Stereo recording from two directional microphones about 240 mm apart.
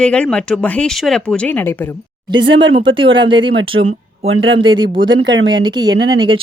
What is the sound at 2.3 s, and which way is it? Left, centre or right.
Speech, centre.